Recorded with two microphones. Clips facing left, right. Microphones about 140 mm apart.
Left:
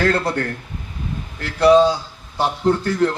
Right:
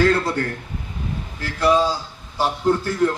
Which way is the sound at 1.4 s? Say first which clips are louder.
Left 6 dB; 65° left (ahead or behind).